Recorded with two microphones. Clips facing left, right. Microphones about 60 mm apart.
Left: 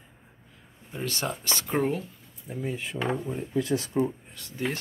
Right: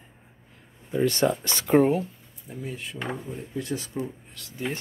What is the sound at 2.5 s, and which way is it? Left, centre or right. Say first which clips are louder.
Speech: left 3 dB; centre.